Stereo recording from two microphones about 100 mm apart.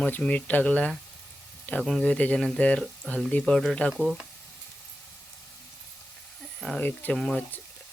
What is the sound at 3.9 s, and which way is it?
Speech, 5° right (ahead or behind).